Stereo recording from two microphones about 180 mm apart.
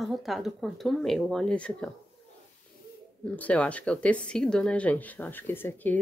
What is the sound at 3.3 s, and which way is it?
Speech, 10° left (ahead or behind).